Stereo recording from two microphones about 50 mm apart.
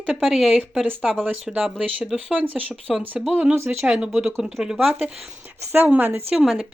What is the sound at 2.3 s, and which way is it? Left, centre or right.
Speech, right.